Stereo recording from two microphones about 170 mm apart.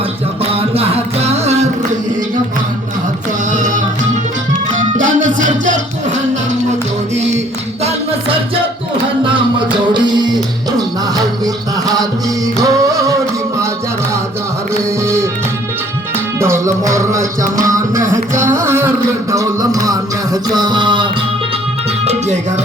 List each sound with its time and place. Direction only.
0.5 s music: 35° right (ahead or behind)
3.5 s music: 45° right (ahead or behind)
9.9 s music: 25° right (ahead or behind)
12.6 s singing: 20° right (ahead or behind)
15.0 s music: 15° right (ahead or behind)
16.4 s music: 15° right (ahead or behind)
18.6 s a sound: 15° right (ahead or behind)